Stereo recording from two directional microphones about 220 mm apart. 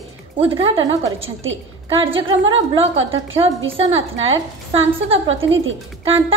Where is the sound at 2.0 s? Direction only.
25° right (ahead or behind).